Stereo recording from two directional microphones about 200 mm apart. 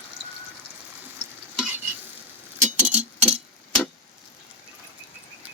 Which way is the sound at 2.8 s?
5° right (ahead or behind).